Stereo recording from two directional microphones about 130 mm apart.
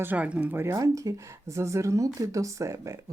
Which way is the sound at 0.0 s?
10° right (ahead or behind).